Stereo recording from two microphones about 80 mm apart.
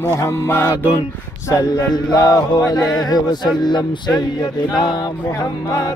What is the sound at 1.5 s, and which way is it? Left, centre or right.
Mantra, left.